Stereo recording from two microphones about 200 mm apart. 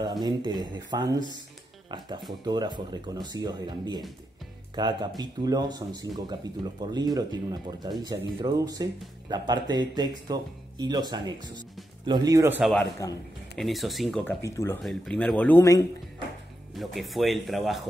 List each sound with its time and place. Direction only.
0.0 s speech: 20° right (ahead or behind)
13.0 s speech: 15° left (ahead or behind)
13.6 s speech: centre (ahead or behind)
14.4 s speech: 15° left (ahead or behind)
14.8 s speech: 5° left (ahead or behind)
16.7 s speech: centre (ahead or behind)